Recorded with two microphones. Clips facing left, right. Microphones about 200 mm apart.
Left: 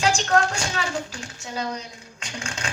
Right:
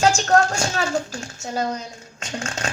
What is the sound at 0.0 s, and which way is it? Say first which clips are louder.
Speech: right 4 dB; 45° right (ahead or behind).